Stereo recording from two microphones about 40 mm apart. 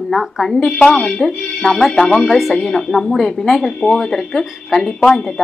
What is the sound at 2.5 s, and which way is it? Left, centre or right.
Speech, centre.